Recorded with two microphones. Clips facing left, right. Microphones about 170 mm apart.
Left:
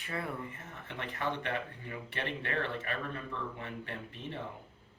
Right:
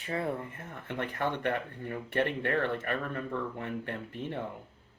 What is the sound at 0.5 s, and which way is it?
Speech, 55° right (ahead or behind).